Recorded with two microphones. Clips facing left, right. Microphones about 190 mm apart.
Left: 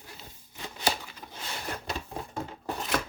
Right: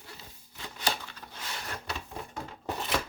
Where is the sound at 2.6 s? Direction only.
Centre (ahead or behind).